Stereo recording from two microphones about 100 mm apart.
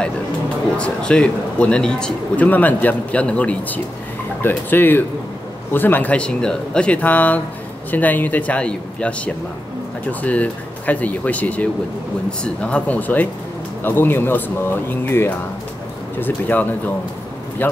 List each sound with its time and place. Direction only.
0.7 s a man's voice: 10° left (ahead or behind)